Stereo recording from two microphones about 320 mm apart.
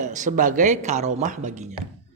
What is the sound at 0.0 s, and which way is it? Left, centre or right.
Speech, right.